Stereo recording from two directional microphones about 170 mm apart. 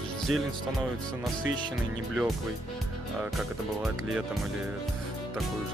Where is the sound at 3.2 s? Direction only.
5° right (ahead or behind).